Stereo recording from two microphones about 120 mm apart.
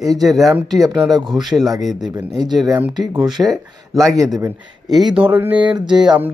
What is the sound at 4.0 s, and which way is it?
Speech, 30° right (ahead or behind).